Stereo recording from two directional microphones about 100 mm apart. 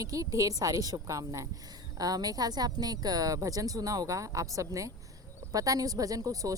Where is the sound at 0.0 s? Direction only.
35° right (ahead or behind).